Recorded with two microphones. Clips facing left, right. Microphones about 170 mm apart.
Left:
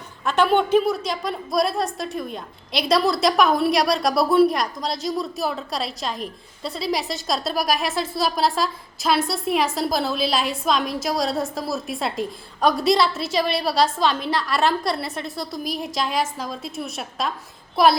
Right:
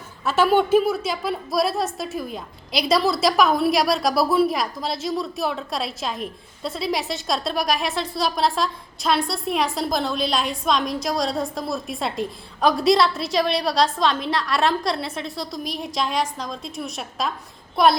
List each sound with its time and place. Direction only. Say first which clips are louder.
0.3 s a woman's voice: right 1 dB; 5° right (ahead or behind)